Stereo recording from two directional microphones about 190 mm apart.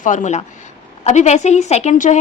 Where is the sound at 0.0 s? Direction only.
40° left (ahead or behind).